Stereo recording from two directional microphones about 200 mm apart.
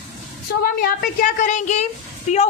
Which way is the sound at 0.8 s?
45° left (ahead or behind).